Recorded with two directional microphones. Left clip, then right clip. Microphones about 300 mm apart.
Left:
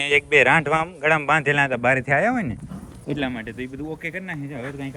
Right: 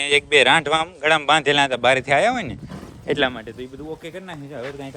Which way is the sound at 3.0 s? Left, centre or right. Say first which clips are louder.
Right 7 dB; right.